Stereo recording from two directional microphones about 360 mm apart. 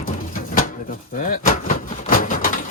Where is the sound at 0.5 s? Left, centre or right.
Left.